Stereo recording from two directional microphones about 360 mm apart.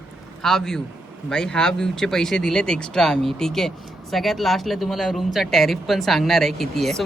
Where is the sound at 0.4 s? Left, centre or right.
Centre.